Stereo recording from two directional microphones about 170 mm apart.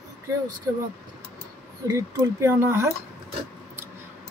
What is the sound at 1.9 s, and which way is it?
Speech, 15° right (ahead or behind).